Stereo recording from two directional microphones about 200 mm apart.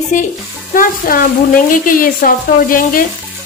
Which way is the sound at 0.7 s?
45° left (ahead or behind).